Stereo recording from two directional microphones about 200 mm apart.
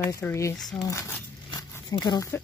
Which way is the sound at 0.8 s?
15° left (ahead or behind).